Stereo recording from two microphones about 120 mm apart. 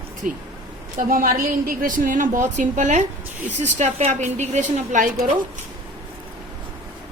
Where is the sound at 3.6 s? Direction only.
75° right (ahead or behind).